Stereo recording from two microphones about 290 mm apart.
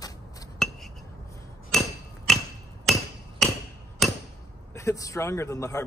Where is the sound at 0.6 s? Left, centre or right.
Centre.